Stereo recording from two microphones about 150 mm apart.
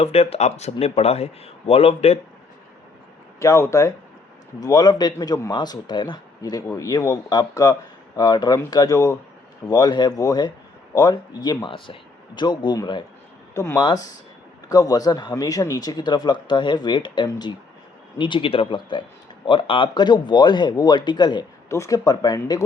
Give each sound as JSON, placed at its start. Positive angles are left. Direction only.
{"t": 0.0, "sound": "speech", "side_deg": 40}
{"t": 3.4, "sound": "speech", "side_deg": 20}